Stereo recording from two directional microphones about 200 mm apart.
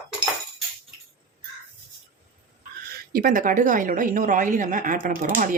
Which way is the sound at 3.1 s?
45° right (ahead or behind).